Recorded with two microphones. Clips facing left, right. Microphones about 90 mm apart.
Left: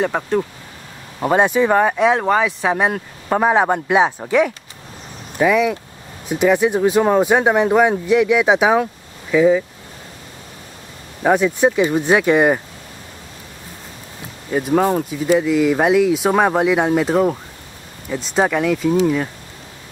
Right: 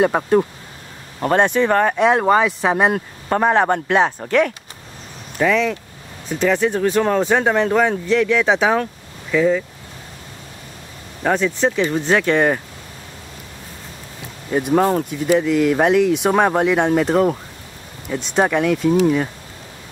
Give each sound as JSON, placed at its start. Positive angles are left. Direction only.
{"t": 0.1, "sound": "speech", "side_deg": -20}
{"t": 1.2, "sound": "speech", "side_deg": 5}
{"t": 11.2, "sound": "speech", "side_deg": 10}
{"t": 14.5, "sound": "speech", "side_deg": 0}